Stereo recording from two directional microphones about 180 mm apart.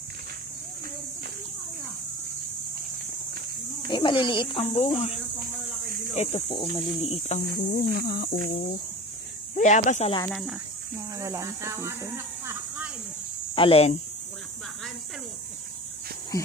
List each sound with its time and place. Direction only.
3.8 s speech: 25° left (ahead or behind)
7.5 s a sound: 55° left (ahead or behind)
9.6 s speech: 45° left (ahead or behind)
11.1 s speech: 15° right (ahead or behind)
13.6 s speech: 35° left (ahead or behind)
16.3 s speech: 20° left (ahead or behind)